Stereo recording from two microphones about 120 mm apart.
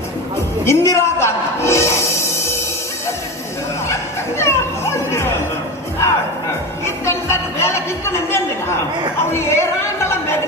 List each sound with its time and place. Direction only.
0.7 s music: 20° left (ahead or behind)
3.9 s music: 20° left (ahead or behind)
7.1 s a man's voice: 20° left (ahead or behind)
9.2 s a sound: 20° left (ahead or behind)